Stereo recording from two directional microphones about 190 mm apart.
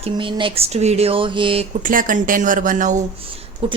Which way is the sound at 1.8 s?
45° right (ahead or behind).